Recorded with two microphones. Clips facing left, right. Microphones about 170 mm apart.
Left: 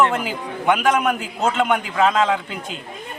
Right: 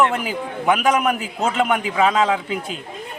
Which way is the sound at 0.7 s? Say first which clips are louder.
Even; 10° right (ahead or behind).